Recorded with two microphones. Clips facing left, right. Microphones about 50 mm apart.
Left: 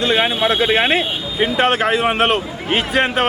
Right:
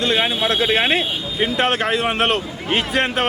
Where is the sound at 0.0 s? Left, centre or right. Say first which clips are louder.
Left 3 dB; centre.